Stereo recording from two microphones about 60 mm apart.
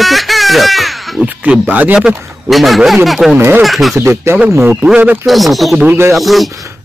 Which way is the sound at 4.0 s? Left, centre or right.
Right.